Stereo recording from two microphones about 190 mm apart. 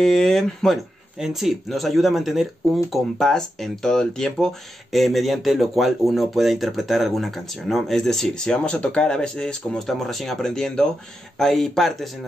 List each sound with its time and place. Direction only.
0.0 s speech: centre (ahead or behind)